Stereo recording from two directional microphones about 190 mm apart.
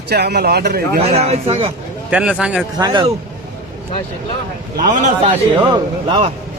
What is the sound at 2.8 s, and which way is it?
Speech, 20° right (ahead or behind).